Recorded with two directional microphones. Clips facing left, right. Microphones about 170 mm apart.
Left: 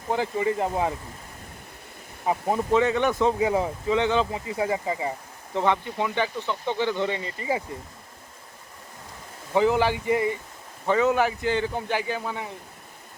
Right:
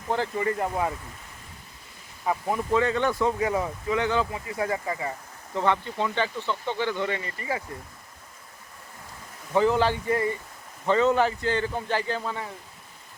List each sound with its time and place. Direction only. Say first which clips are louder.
0.1 s speech: left 2 dB; 15° left (ahead or behind)
2.2 s speech: left 2 dB; 20° left (ahead or behind)
9.5 s speech: left 1 dB; 15° left (ahead or behind)